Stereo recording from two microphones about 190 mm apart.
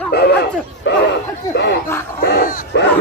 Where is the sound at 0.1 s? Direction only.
55° left (ahead or behind).